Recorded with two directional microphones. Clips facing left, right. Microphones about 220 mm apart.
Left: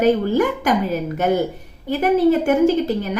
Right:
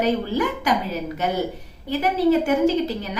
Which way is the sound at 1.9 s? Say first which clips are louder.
Left 4 dB; 50° left (ahead or behind).